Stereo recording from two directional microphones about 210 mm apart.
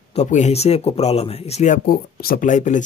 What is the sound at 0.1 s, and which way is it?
Speech, 35° left (ahead or behind).